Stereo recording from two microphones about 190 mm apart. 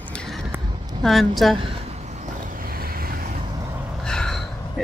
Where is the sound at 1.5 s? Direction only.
30° right (ahead or behind); by 3.1 s 50° right (ahead or behind).